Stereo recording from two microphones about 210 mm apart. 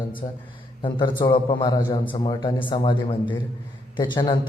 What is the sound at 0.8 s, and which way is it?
A man's voice, 25° left (ahead or behind).